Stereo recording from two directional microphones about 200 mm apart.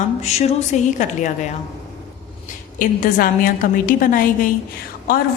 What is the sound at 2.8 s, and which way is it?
A woman's voice, 45° left (ahead or behind).